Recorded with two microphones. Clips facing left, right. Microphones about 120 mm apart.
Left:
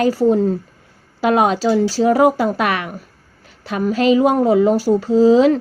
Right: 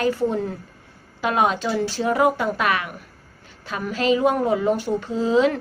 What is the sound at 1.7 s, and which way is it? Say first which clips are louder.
A woman's voice: left 7 dB; 35° left (ahead or behind).